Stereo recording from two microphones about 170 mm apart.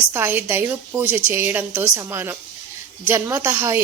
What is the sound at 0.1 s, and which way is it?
A woman's voice, 15° right (ahead or behind).